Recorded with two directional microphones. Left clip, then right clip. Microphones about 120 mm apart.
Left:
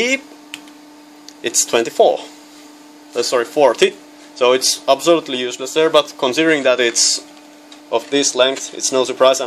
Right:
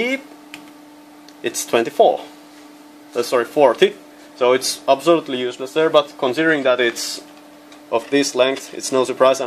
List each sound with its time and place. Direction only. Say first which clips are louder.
0.0 s tick-tock: left 4 dB; 30° left (ahead or behind)
1.4 s speech: left 2 dB; 10° left (ahead or behind)
3.1 s speech: left 1 dB; 5° left (ahead or behind); by 7.2 s 30° left (ahead or behind)
7.9 s speech: left 1 dB; 5° left (ahead or behind)